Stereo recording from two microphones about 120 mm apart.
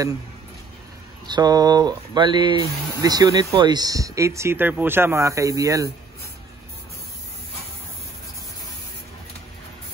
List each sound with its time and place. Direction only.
1.2 s speech: 35° right (ahead or behind)